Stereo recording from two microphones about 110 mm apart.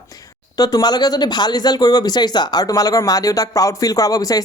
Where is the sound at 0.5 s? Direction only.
35° left (ahead or behind).